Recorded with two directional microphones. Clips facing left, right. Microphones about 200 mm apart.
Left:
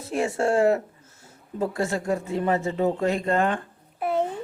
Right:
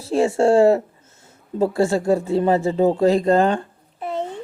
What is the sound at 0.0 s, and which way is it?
A woman's voice, 30° right (ahead or behind).